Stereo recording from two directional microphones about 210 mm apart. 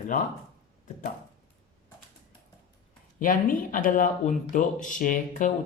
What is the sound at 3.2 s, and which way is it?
Speech, 40° left (ahead or behind).